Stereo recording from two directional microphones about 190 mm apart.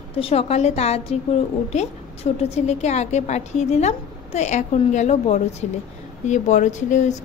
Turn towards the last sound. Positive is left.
turn(degrees=40)  # may be behind; listen again after turning